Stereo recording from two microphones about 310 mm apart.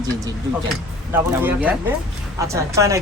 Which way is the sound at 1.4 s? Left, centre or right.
Centre.